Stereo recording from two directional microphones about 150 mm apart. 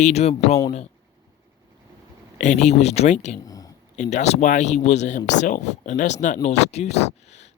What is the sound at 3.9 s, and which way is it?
Speech, 50° left (ahead or behind).